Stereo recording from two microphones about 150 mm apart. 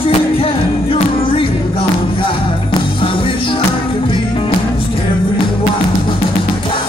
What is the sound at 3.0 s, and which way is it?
Music, 35° left (ahead or behind).